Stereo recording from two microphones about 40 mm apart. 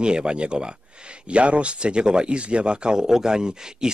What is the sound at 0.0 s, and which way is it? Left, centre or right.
Speech, right.